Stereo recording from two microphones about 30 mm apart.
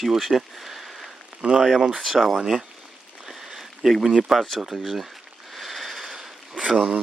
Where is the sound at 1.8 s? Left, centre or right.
Centre.